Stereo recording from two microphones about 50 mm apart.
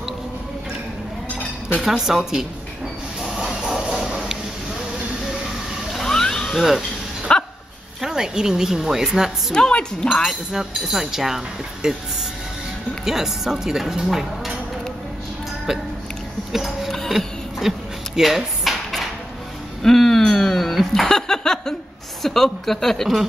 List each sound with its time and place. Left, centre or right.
1.8 s speech: centre
3.4 s a sound: centre
4.1 s a sound: centre
5.9 s a sound: centre
7.3 s dog: centre
8.0 s speech: centre
9.5 s a woman's voice: centre
10.5 s speech: centre
13.0 s speech: centre
16.5 s speech: centre
17.6 s dishes: centre
19.8 s a sound: centre
22.2 s a woman's voice: centre